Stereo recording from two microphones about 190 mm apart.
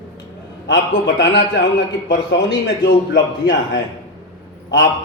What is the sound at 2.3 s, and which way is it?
A man's voice, 65° left (ahead or behind).